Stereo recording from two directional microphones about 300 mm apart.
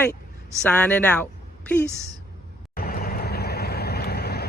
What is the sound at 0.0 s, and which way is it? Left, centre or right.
A woman's voice, centre.